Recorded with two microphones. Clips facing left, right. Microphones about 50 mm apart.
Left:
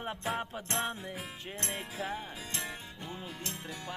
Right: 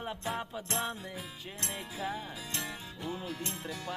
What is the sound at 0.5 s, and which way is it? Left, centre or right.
Music, left.